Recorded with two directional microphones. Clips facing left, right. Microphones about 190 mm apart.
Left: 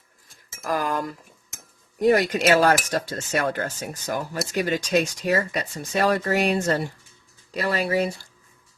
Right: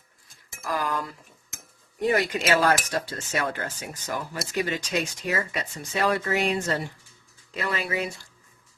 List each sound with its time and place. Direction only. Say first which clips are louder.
0.6 s speech: left 3 dB; 45° left (ahead or behind)